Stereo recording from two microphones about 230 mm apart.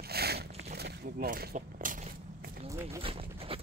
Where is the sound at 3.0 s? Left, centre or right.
Right.